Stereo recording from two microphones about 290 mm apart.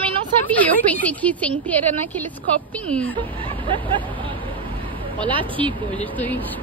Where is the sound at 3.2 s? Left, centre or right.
Centre.